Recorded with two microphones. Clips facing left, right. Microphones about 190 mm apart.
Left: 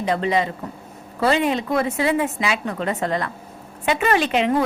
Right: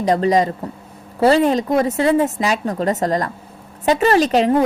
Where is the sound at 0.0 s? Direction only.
40° right (ahead or behind).